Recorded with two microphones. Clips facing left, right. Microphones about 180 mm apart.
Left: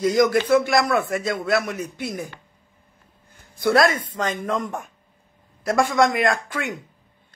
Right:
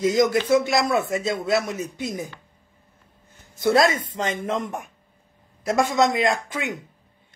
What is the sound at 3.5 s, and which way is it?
A man's voice, 20° right (ahead or behind).